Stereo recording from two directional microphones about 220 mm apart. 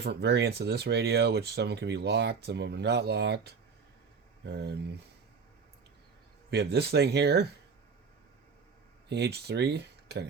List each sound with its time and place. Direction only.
0.0 s speech: 50° right (ahead or behind)
6.5 s speech: 50° right (ahead or behind)
9.0 s speech: 50° right (ahead or behind)